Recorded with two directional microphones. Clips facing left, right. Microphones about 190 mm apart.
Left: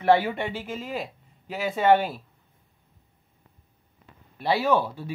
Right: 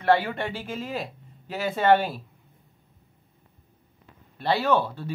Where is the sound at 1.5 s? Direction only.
Centre (ahead or behind).